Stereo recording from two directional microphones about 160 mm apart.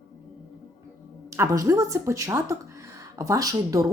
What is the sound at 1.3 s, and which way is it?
A woman's voice, 20° right (ahead or behind).